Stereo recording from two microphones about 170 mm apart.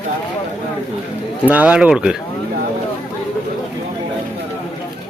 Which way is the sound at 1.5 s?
5° right (ahead or behind).